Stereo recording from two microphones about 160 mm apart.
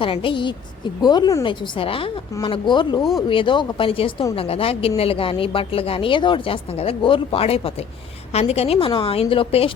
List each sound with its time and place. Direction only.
0.0 s a woman's voice: 35° left (ahead or behind)
3.0 s speech: centre (ahead or behind)
3.2 s a woman's voice: 30° left (ahead or behind)